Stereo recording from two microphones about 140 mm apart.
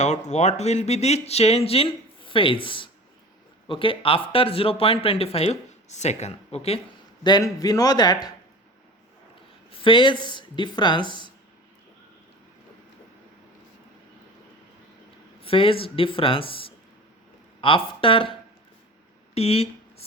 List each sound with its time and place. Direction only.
0.3 s speech: 55° left (ahead or behind)
7.3 s speech: 30° left (ahead or behind)
9.8 s speech: 35° left (ahead or behind)
15.4 s speech: 40° left (ahead or behind)
19.3 s a sound: 45° left (ahead or behind)